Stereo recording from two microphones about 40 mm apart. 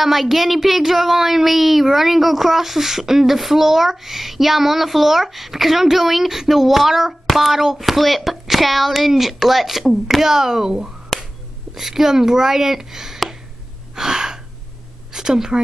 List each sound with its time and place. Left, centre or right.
0.0 s speech: centre
10.2 s speech: centre
13.9 s gasp: centre
15.1 s speech: centre